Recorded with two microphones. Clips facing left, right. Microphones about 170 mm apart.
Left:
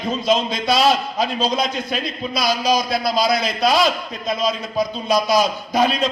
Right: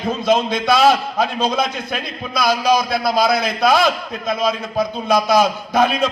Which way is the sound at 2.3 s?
55° right (ahead or behind).